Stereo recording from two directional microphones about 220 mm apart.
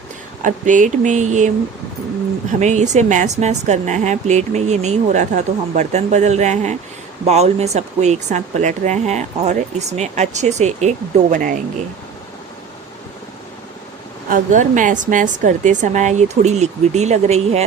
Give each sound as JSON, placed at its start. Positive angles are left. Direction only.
{"t": 0.4, "sound": "speech", "side_deg": -35}
{"t": 14.3, "sound": "speech", "side_deg": -35}